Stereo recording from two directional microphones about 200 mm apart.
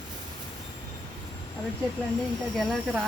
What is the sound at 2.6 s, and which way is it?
Speech, centre (ahead or behind).